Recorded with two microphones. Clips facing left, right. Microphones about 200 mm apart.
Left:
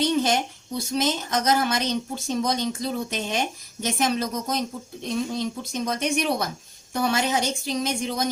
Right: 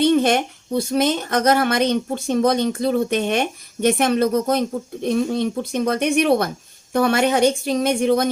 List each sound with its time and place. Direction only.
0.0 s a woman's voice: 60° right (ahead or behind)